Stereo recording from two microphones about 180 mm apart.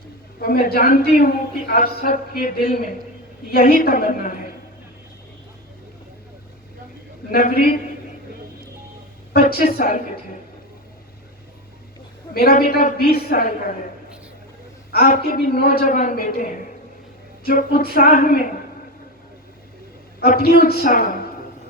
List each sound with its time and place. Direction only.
0.3 s a woman's voice: 55° left (ahead or behind)
7.3 s a woman's voice: 55° left (ahead or behind)
9.3 s speech: 60° left (ahead or behind)
12.3 s a woman's voice: 55° left (ahead or behind)
14.9 s a woman's voice: 55° left (ahead or behind)
20.1 s a woman's voice: 60° left (ahead or behind)